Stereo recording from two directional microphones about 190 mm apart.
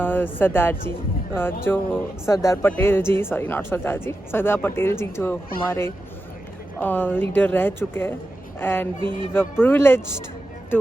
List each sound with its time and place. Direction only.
0.0 s speech: 10° left (ahead or behind)